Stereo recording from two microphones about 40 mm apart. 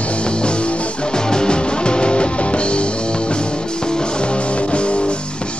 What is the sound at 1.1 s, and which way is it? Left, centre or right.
Music, centre.